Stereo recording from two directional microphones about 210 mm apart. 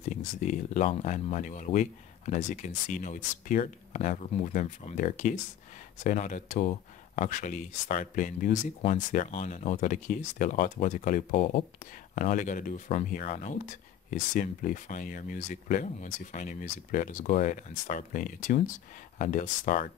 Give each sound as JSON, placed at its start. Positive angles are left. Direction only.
{"t": 0.2, "sound": "speech", "side_deg": 35}